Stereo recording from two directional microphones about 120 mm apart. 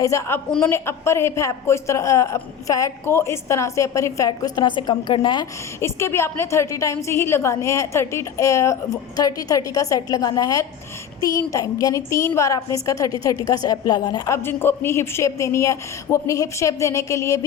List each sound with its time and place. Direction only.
0.0 s a woman's voice: 25° left (ahead or behind); by 5.5 s 40° left (ahead or behind)
5.8 s a woman's voice: 20° left (ahead or behind); by 14.3 s 40° left (ahead or behind)
14.3 s a woman's voice: 20° left (ahead or behind)